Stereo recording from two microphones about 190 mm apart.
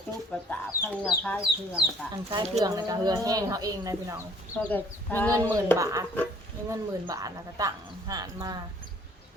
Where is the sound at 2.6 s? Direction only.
20° right (ahead or behind).